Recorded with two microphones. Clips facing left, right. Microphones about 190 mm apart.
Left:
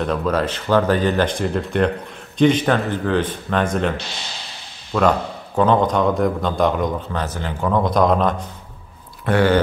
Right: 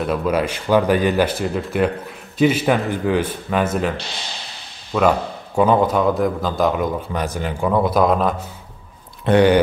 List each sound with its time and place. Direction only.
0.0 s speech: 10° right (ahead or behind)
4.9 s a man's voice: 5° right (ahead or behind)
9.2 s speech: 20° right (ahead or behind)